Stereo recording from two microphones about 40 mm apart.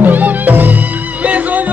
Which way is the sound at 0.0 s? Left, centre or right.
Right.